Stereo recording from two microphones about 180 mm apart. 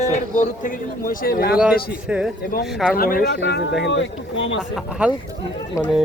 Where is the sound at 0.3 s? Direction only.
45° left (ahead or behind).